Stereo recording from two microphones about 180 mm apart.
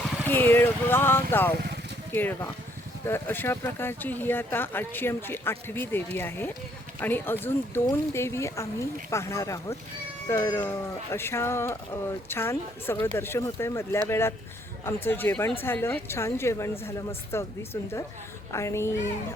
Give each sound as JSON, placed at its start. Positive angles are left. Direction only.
{"t": 0.3, "sound": "speech", "side_deg": 10}